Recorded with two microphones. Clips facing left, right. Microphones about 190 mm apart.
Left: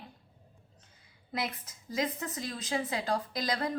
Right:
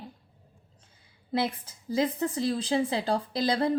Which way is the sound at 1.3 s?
30° right (ahead or behind).